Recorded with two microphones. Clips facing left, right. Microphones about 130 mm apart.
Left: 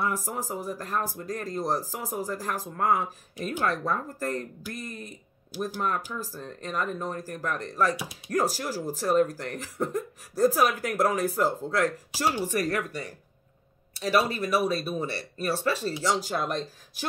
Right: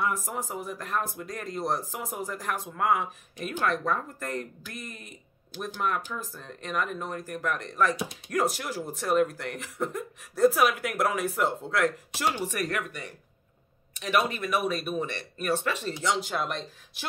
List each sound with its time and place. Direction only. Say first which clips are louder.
0.0 s speech: even; 35° left (ahead or behind)
6.1 s speech: left 2 dB; 35° left (ahead or behind)